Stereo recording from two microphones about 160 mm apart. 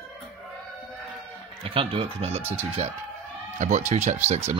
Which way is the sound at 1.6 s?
35° right (ahead or behind).